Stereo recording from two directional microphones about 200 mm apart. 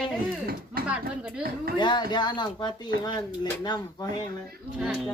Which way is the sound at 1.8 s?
20° left (ahead or behind).